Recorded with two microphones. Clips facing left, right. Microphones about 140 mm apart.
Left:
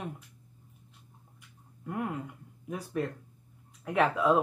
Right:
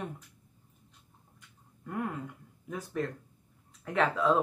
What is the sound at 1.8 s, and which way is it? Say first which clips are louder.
Speech: left 1 dB; 15° left (ahead or behind).